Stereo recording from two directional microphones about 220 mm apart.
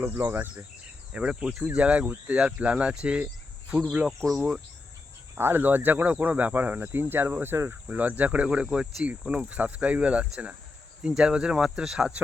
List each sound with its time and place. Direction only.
0.0 s speech: 10° right (ahead or behind)